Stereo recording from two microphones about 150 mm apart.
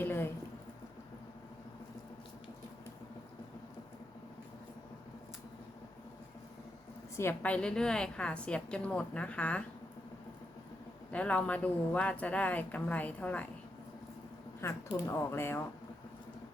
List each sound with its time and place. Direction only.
0.0 s a sound: 15° left (ahead or behind)
7.2 s a woman's voice: 15° left (ahead or behind)
11.1 s a woman's voice: 10° left (ahead or behind)
14.6 s a woman's voice: 15° left (ahead or behind)